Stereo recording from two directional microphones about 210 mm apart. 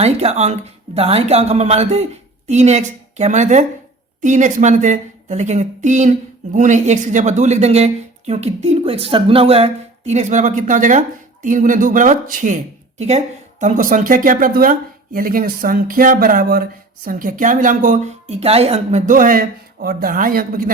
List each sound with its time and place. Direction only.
0.0 s speech: 30° right (ahead or behind)